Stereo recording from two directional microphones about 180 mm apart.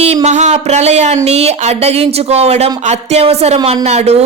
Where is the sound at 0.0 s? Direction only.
40° right (ahead or behind).